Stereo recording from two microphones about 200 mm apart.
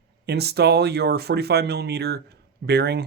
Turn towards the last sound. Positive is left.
turn(degrees=-55)  # may be behind; listen again after turning